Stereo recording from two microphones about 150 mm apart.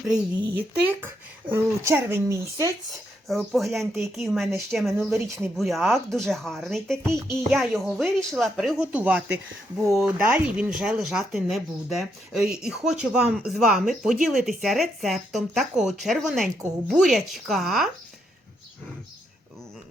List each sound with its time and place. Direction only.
0.1 s speech: 10° right (ahead or behind)
3.2 s speech: centre (ahead or behind)
7.0 s music: 20° right (ahead or behind)
7.5 s speech: centre (ahead or behind)